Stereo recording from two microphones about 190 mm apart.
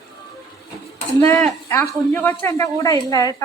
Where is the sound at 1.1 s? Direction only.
10° left (ahead or behind).